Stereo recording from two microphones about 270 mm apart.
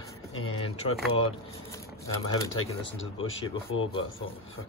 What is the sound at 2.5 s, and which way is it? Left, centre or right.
Speech, left.